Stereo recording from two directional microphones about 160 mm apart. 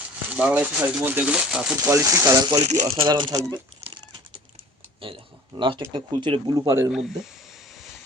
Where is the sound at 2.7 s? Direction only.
45° right (ahead or behind); by 3.6 s 20° right (ahead or behind).